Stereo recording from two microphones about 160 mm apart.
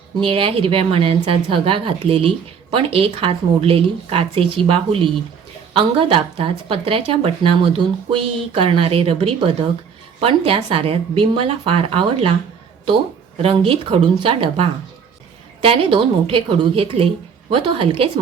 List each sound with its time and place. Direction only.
0.2 s speech: 35° right (ahead or behind)
13.4 s speech: 35° right (ahead or behind)